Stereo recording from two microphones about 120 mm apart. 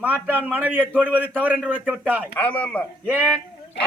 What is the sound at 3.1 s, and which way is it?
Speech, 15° right (ahead or behind).